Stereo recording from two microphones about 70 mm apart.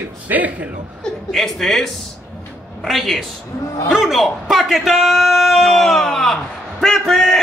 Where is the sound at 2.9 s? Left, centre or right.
Centre.